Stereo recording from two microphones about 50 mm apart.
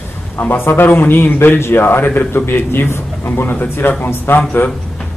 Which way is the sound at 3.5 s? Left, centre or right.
Left.